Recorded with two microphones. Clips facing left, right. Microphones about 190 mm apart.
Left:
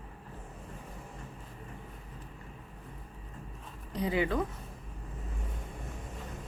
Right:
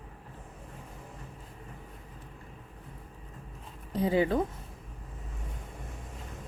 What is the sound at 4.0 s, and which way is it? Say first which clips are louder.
Speech: right 4 dB; 30° right (ahead or behind).